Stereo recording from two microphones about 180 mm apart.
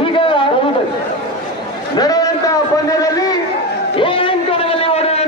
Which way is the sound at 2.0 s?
20° left (ahead or behind).